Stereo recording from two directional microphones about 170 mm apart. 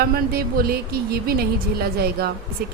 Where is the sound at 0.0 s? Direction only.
65° right (ahead or behind).